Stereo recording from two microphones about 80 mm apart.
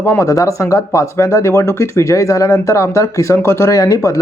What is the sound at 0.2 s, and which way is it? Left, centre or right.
Speech, left.